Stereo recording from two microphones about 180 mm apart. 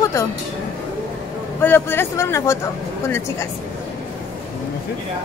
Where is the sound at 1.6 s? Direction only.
10° left (ahead or behind).